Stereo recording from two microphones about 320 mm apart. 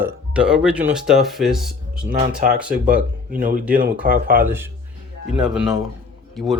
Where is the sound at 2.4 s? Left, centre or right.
Right.